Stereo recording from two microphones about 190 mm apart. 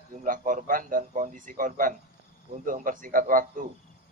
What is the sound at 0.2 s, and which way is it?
A man's voice, 45° right (ahead or behind).